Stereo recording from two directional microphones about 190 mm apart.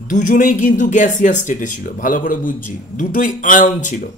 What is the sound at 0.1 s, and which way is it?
Speech, 45° left (ahead or behind).